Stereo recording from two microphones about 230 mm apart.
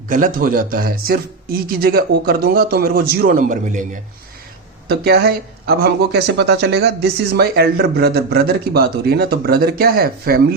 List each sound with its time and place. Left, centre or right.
0.1 s speech: right
4.9 s speech: right